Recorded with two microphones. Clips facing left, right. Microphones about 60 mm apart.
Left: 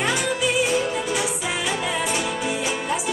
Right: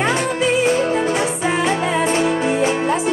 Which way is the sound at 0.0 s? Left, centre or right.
Right.